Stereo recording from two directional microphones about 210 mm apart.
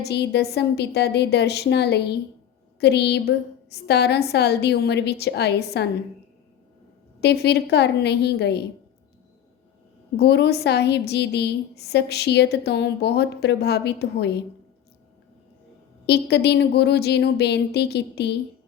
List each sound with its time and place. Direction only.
0.0 s a woman's voice: 55° left (ahead or behind)
7.2 s a woman's voice: 50° left (ahead or behind)
10.2 s a woman's voice: 50° left (ahead or behind)
16.0 s a woman's voice: 50° left (ahead or behind)